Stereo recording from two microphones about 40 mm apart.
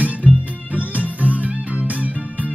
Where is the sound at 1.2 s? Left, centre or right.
Right.